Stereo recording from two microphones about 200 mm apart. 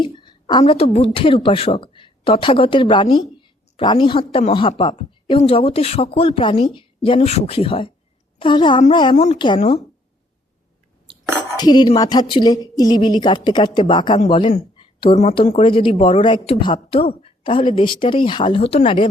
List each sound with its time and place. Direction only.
0.0 s a woman's voice: 25° left (ahead or behind)
11.5 s speech: 20° left (ahead or behind)